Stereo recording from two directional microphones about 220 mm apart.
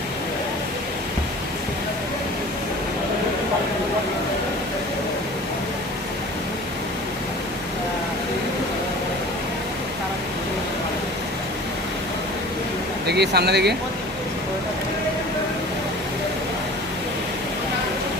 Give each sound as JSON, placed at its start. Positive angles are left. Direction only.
{"t": 13.1, "sound": "speech", "side_deg": -50}